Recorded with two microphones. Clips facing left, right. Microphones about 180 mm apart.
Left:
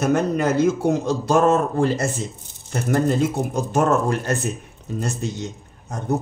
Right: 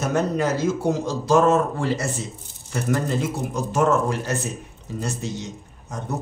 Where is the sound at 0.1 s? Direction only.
55° left (ahead or behind).